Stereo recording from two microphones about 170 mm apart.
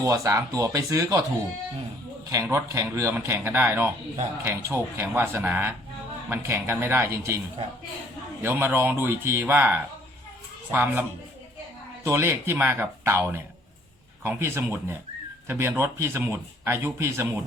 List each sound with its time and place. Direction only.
0.0 s speech: 20° right (ahead or behind)
2.3 s speech: 15° right (ahead or behind)
8.4 s speech: 15° right (ahead or behind)
12.0 s speech: 15° right (ahead or behind)